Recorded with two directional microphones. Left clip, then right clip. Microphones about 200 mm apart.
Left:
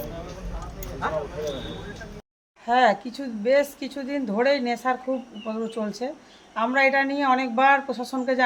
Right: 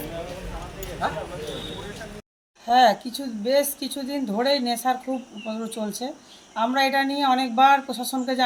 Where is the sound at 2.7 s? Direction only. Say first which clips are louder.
Right 2 dB; centre (ahead or behind).